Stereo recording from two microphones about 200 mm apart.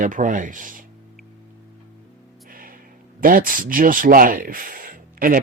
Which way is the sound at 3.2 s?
45° right (ahead or behind).